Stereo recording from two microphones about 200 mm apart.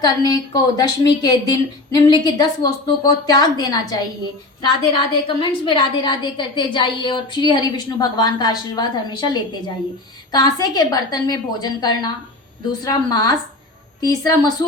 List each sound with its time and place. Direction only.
0.0 s a woman's voice: 20° left (ahead or behind)